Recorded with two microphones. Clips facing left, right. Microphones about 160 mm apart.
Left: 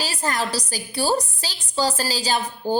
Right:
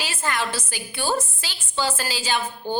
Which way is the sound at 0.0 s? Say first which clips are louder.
Left 2 dB; 40° left (ahead or behind).